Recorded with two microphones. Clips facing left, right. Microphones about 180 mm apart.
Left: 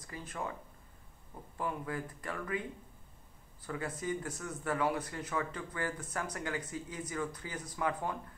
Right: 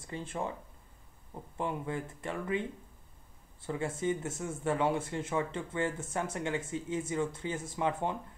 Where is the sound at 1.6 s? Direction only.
25° right (ahead or behind).